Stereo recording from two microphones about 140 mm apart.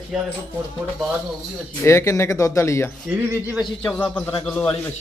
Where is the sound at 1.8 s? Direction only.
20° left (ahead or behind).